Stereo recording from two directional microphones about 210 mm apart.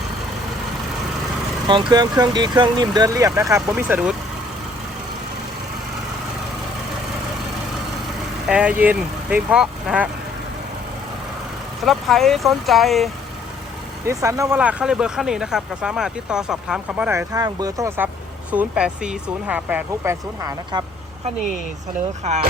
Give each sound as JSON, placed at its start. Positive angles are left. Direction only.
{"t": 1.9, "sound": "speech", "side_deg": -20}
{"t": 8.4, "sound": "speech", "side_deg": -5}
{"t": 11.9, "sound": "speech", "side_deg": 0}
{"t": 14.1, "sound": "speech", "side_deg": -15}
{"t": 22.2, "sound": "speech", "side_deg": -35}